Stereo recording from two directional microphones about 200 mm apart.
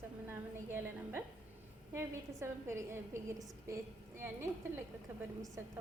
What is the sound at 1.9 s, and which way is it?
A woman's voice, 15° right (ahead or behind).